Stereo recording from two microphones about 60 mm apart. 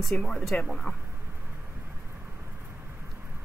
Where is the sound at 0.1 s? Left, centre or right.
Left.